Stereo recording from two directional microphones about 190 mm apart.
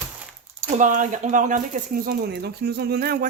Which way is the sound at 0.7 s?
45° right (ahead or behind).